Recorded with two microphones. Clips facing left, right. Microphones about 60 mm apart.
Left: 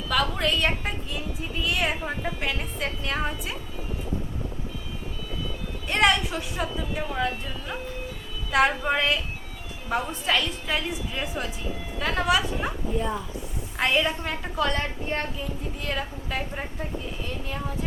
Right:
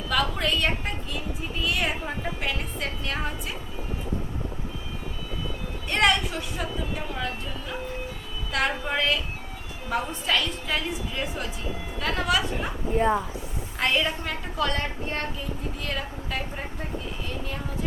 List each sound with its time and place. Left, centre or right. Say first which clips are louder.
0.1 s speech: left 1 dB; centre
5.9 s speech: left 1 dB; centre
8.5 s speech: left 4 dB; centre
12.9 s speech: right 8 dB; right
13.7 s speech: left 1 dB; centre